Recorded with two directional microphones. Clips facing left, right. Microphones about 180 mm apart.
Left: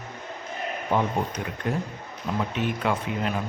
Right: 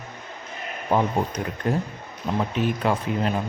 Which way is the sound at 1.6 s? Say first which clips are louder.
Right 3 dB; 35° right (ahead or behind).